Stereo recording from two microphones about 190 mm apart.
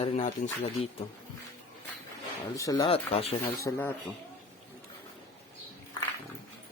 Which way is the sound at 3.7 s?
15° left (ahead or behind).